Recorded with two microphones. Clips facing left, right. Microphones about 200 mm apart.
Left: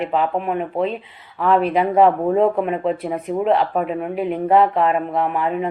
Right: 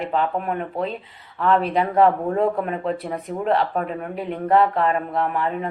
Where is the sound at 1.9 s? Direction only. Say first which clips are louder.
Left 3 dB; 25° left (ahead or behind).